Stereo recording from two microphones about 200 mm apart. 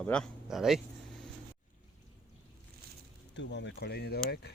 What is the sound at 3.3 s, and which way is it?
Speech, 65° left (ahead or behind).